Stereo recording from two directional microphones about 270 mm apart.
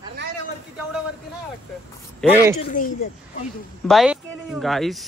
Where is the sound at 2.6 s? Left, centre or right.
Left.